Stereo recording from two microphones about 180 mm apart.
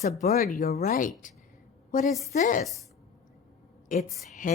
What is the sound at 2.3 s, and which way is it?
Speech, 45° left (ahead or behind).